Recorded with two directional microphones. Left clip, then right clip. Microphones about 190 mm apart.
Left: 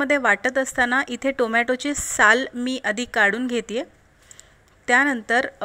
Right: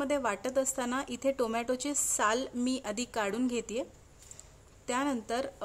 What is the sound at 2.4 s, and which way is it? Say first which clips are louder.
A woman's voice: left 9 dB; 10° left (ahead or behind).